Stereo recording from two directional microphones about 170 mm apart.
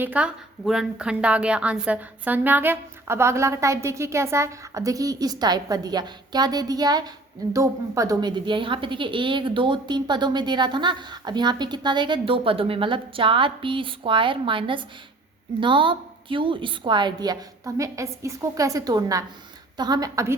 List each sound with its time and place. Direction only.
0.0 s a woman's voice: 10° right (ahead or behind)